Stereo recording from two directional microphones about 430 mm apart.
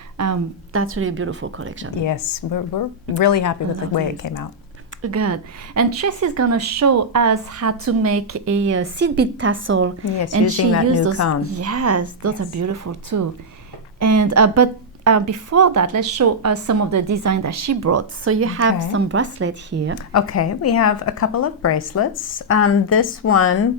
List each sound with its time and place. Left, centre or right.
0.2 s speech: right
2.0 s speech: left
5.0 s a woman's voice: right
20.1 s a woman's voice: left